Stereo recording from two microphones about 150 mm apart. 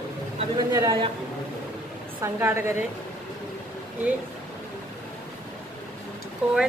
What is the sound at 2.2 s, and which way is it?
Speech, 15° right (ahead or behind).